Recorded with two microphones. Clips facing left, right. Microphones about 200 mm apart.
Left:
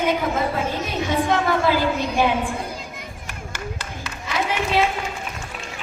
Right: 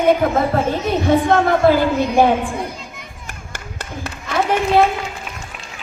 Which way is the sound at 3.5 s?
55° right (ahead or behind).